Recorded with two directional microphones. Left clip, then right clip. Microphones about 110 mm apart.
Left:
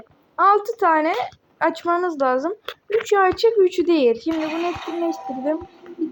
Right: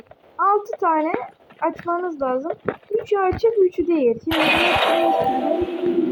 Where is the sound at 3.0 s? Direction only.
35° left (ahead or behind).